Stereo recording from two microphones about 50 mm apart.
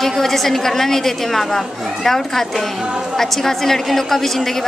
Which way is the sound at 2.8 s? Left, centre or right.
Centre.